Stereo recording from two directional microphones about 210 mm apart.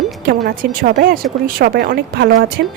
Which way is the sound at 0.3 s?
45° right (ahead or behind).